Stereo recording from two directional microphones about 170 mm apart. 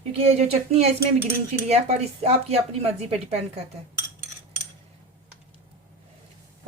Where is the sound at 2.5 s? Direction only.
35° right (ahead or behind).